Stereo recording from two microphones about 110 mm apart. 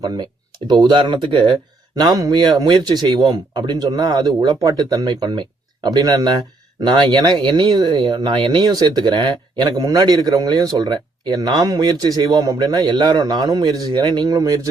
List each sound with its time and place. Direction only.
0.0 s speech: 35° right (ahead or behind)
2.0 s speech: 35° right (ahead or behind)